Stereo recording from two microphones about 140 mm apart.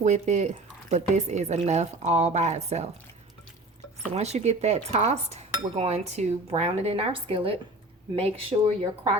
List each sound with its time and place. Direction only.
0.0 s dishes: 55° right (ahead or behind)
4.1 s dishes: 50° right (ahead or behind)